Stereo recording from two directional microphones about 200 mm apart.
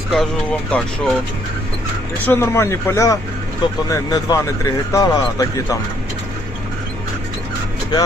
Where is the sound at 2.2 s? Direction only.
10° left (ahead or behind).